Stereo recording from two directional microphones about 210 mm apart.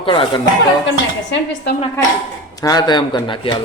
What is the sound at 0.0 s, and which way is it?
Speech, 25° left (ahead or behind).